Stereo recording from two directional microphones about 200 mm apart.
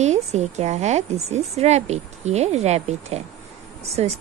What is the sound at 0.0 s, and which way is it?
A woman's voice, 35° right (ahead or behind).